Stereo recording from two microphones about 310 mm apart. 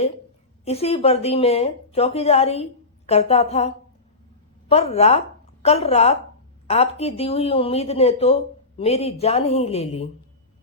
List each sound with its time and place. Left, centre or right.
0.6 s speech: centre